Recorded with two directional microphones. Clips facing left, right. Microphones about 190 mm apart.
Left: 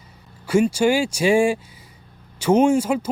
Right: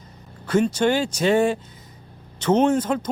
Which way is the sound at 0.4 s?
10° left (ahead or behind).